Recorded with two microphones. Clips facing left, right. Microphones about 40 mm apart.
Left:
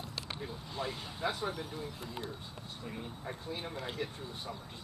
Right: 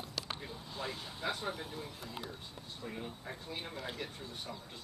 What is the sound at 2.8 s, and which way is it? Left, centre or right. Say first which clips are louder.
Speech: left 1 dB; centre.